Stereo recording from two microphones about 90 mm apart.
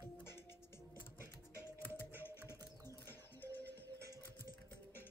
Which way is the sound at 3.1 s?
25° left (ahead or behind).